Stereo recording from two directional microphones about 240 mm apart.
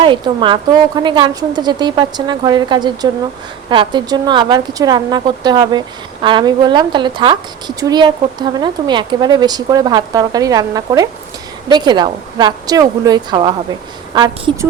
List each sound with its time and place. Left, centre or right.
0.0 s a woman's voice: centre